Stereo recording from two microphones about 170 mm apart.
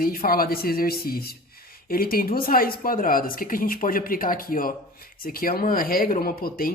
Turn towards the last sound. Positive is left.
turn(degrees=60)  # may be behind; listen again after turning